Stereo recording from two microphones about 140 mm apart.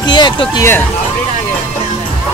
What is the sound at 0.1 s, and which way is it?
Speech, 30° left (ahead or behind).